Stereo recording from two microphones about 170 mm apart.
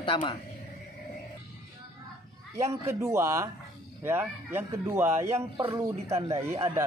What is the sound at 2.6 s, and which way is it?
Speech, 15° right (ahead or behind).